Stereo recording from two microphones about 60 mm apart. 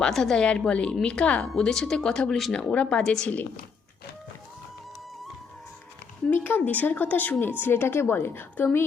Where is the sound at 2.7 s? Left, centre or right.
Centre.